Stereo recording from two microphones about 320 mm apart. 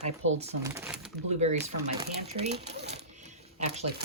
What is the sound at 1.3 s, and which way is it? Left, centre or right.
Speech, right.